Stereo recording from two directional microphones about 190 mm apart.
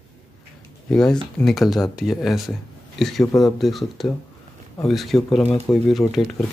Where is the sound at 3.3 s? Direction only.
20° left (ahead or behind).